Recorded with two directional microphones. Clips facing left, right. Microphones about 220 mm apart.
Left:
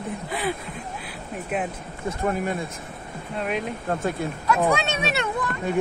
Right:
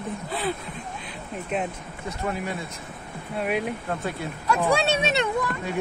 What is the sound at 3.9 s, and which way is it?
Speech, 45° left (ahead or behind).